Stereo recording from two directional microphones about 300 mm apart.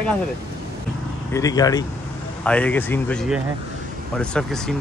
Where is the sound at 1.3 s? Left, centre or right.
Centre.